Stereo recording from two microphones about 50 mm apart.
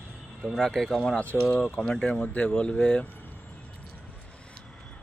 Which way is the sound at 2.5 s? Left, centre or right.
Centre.